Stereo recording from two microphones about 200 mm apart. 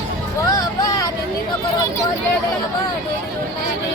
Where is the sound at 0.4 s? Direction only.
15° left (ahead or behind).